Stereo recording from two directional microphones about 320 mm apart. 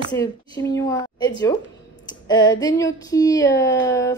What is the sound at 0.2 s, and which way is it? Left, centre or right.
Speech, centre.